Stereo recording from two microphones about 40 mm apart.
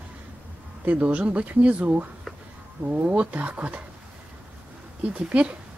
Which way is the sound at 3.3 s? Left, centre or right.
Right.